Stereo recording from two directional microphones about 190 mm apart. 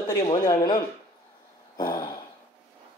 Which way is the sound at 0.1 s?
20° left (ahead or behind).